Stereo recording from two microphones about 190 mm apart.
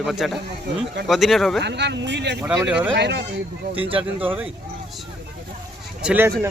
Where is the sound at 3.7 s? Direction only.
30° right (ahead or behind).